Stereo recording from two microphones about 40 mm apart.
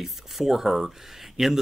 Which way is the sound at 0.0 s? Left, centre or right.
Centre.